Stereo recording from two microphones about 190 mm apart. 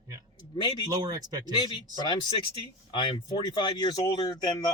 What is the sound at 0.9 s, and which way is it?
Speech, 20° right (ahead or behind).